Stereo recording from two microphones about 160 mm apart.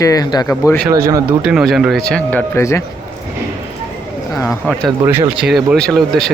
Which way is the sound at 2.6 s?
15° left (ahead or behind).